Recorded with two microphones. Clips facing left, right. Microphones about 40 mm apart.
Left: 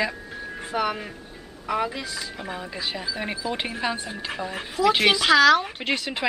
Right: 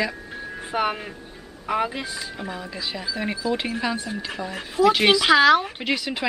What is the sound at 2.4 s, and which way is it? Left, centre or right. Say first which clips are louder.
A woman's voice: left 1 dB; centre.